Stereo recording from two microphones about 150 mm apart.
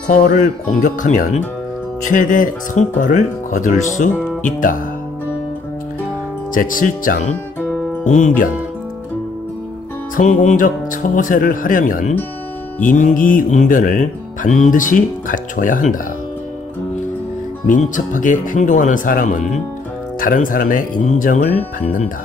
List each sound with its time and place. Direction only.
0.0 s speech: 55° left (ahead or behind)
6.5 s speech: 65° left (ahead or behind)
10.1 s speech: 55° left (ahead or behind)
17.6 s speech: 60° left (ahead or behind)
20.2 s speech: 65° left (ahead or behind)